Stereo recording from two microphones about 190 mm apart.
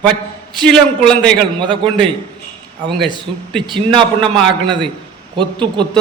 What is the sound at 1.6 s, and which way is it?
Speech, 25° right (ahead or behind).